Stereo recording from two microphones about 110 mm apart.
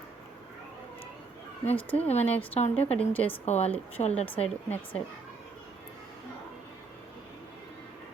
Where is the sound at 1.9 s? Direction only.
70° left (ahead or behind).